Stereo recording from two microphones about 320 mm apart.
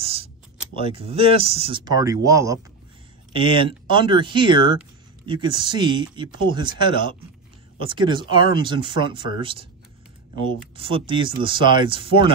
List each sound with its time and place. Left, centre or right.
0.0 s a sound: centre
0.7 s speech: centre
10.8 s speech: centre